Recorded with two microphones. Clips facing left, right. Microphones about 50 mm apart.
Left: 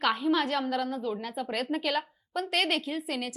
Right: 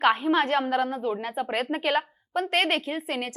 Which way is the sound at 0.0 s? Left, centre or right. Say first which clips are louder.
Right 4 dB; right.